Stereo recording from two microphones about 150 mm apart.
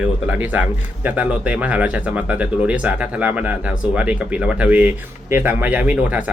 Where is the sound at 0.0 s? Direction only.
10° right (ahead or behind).